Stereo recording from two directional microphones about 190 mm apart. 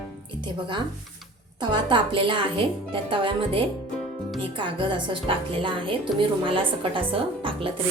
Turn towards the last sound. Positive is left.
turn(degrees=-25)  # may be behind; listen again after turning